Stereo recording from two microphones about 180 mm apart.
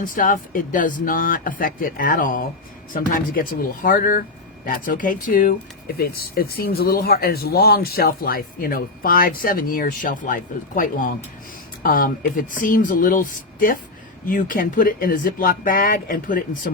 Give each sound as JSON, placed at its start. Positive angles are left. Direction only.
{"t": 0.0, "sound": "speech", "side_deg": 50}